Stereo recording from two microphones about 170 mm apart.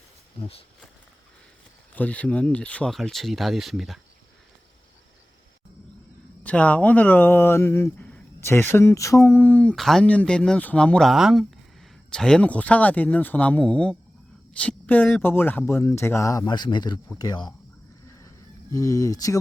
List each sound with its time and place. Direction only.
1.9 s speech: 10° left (ahead or behind)
6.4 s speech: 10° left (ahead or behind); by 17.5 s 25° left (ahead or behind)
18.7 s speech: 20° left (ahead or behind)